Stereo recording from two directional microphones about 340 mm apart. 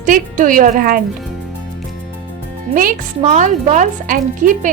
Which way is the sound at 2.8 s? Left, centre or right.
Right.